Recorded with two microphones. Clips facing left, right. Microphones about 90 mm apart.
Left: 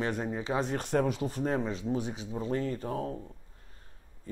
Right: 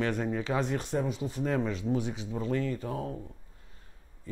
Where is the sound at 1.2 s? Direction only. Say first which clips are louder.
Left 1 dB; 40° left (ahead or behind).